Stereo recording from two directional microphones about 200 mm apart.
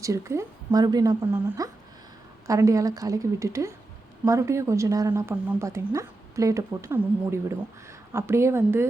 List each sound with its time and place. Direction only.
0.0 s a woman's voice: 15° right (ahead or behind)